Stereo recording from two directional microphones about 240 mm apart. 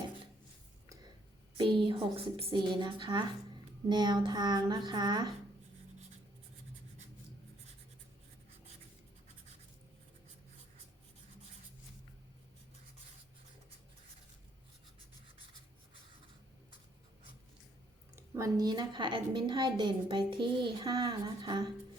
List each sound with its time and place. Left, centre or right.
1.5 s a woman's voice: right
18.2 s a woman's voice: centre